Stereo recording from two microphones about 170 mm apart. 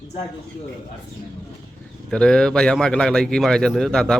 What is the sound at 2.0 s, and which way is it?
A man's voice, 5° left (ahead or behind).